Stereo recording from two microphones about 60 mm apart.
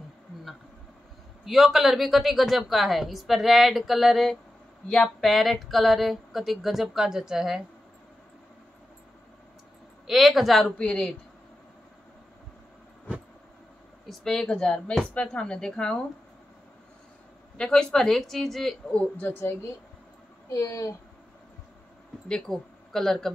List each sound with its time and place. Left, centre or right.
1.4 s a woman's voice: centre
10.0 s a woman's voice: centre
10.6 s a woman's voice: centre
14.0 s a woman's voice: centre
17.6 s a woman's voice: centre
18.9 s a woman's voice: left
20.4 s speech: left
22.5 s speech: centre